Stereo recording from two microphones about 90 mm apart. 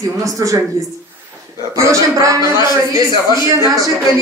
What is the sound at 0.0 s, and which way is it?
Speech, 40° right (ahead or behind).